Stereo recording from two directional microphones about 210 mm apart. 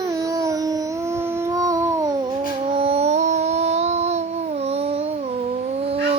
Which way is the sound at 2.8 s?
30° right (ahead or behind).